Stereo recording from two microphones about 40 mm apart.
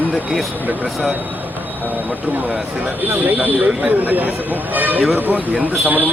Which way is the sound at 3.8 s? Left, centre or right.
Right.